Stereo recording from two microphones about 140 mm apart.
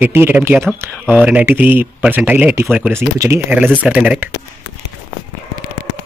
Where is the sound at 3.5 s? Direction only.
10° right (ahead or behind).